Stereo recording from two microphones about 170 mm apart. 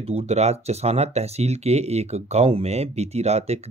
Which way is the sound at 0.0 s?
35° right (ahead or behind).